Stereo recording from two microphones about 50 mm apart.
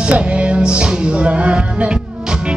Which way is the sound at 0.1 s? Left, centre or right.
Right.